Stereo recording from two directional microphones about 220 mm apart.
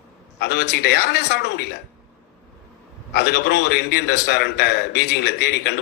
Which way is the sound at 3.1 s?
50° left (ahead or behind).